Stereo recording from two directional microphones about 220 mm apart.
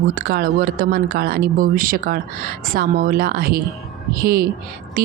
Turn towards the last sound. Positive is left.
turn(degrees=-40)  # may be behind; listen again after turning